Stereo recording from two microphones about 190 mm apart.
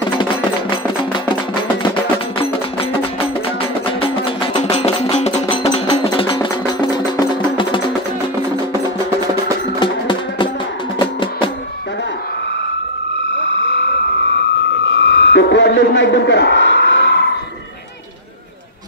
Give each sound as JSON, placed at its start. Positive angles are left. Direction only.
{"t": 0.2, "sound": "music", "side_deg": 25}
{"t": 2.3, "sound": "music", "side_deg": 30}
{"t": 9.8, "sound": "music", "side_deg": 25}
{"t": 14.9, "sound": "a sound", "side_deg": 65}